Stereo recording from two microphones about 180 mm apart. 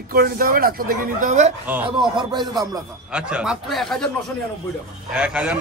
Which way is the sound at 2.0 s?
25° right (ahead or behind).